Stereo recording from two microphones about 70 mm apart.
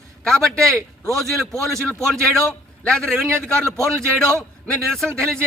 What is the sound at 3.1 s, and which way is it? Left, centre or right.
Speech, right.